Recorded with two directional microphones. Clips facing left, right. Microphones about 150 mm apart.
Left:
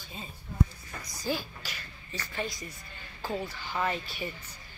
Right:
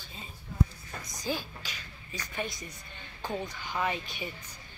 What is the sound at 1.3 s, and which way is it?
Speech, 10° left (ahead or behind).